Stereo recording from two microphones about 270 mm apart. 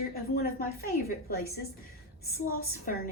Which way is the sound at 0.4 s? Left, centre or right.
Left.